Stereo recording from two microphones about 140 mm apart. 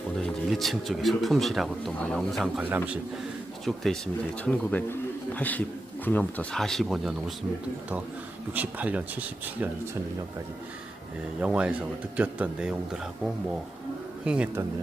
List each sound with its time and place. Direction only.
0.2 s speech: centre (ahead or behind)
2.6 s speech: 15° right (ahead or behind)
3.7 s speech: 5° left (ahead or behind)
8.5 s speech: 10° right (ahead or behind)
11.3 s speech: 10° right (ahead or behind)
14.3 s speech: 10° right (ahead or behind)